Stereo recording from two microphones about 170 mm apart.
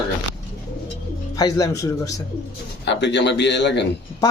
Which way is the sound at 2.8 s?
90° left.